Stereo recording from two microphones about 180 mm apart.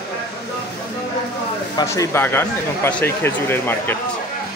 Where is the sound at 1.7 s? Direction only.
15° left (ahead or behind).